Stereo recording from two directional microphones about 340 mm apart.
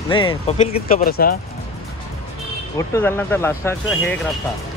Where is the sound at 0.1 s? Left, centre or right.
Centre.